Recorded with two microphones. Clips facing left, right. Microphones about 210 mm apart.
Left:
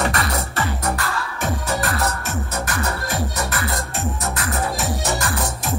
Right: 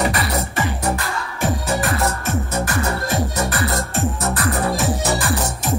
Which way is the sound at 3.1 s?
30° right (ahead or behind).